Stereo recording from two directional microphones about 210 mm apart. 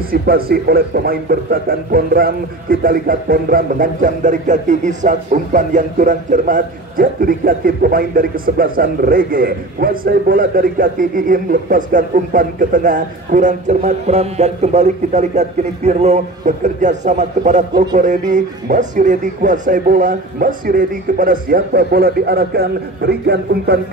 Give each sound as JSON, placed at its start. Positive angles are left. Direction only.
{"t": 0.1, "sound": "a man's voice", "side_deg": -45}